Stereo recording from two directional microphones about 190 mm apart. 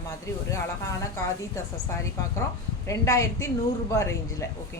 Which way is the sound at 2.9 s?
15° left (ahead or behind).